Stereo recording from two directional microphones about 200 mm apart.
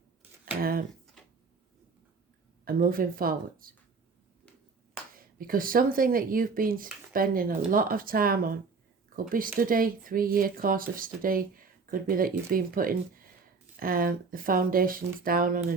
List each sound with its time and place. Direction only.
0.6 s a sound: 45° right (ahead or behind)
2.6 s speech: 45° right (ahead or behind)
5.1 s speech: 45° right (ahead or behind)